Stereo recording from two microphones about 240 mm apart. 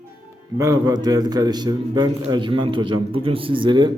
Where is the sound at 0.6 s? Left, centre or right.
Centre.